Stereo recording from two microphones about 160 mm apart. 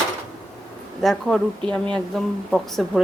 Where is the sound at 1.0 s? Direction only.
5° left (ahead or behind).